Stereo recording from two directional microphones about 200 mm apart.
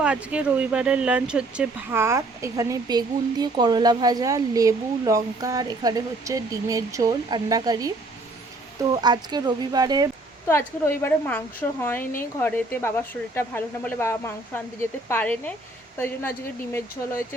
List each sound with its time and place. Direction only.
0.0 s speech: 5° right (ahead or behind)
10.4 s speech: 15° left (ahead or behind)